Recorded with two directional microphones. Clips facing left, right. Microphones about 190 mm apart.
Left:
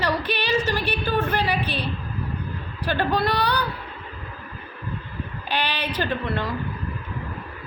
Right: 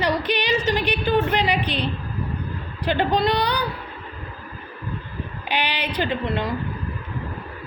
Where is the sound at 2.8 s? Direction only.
20° right (ahead or behind).